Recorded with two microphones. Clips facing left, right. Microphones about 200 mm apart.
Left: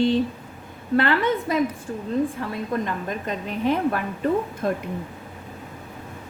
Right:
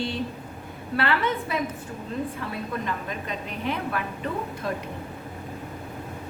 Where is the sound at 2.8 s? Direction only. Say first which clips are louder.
Left 4 dB; 45° left (ahead or behind).